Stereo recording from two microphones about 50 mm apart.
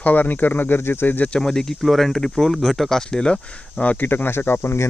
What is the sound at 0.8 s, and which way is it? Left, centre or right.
Speech, left.